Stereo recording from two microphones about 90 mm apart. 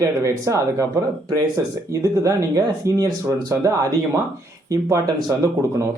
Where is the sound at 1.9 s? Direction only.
40° right (ahead or behind).